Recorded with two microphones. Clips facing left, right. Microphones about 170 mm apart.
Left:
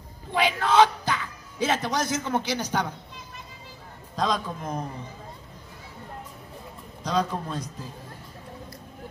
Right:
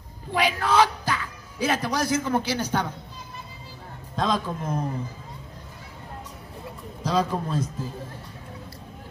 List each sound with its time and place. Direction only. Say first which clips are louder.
0.3 s speech: even; 25° left (ahead or behind)
4.2 s a man's voice: right 1 dB; 5° right (ahead or behind)
7.0 s a man's voice: right 2 dB; 5° right (ahead or behind)